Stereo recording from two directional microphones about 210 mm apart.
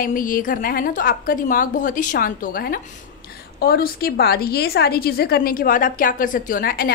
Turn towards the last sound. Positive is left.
turn(degrees=45)  # may be behind; listen again after turning